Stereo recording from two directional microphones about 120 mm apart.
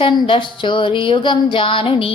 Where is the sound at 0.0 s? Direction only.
45° left (ahead or behind).